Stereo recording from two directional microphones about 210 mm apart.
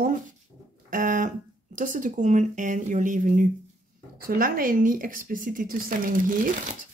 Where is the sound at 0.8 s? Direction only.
40° right (ahead or behind).